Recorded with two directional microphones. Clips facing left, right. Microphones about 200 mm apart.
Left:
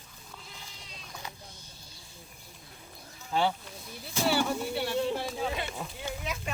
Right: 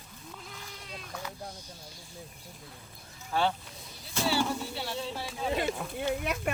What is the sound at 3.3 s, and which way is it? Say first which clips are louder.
Speech: left 1 dB; 15° left (ahead or behind).